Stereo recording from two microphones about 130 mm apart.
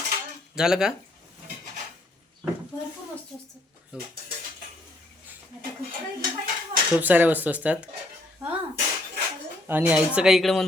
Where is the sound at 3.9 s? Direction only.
10° right (ahead or behind).